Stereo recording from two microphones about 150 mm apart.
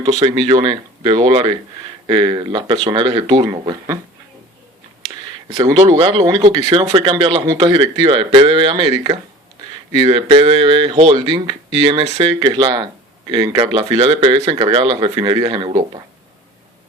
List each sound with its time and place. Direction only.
0.0 s speech: 25° right (ahead or behind)
6.0 s speech: 35° right (ahead or behind)